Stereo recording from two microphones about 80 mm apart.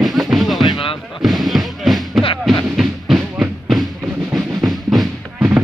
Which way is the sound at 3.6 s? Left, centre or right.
Centre.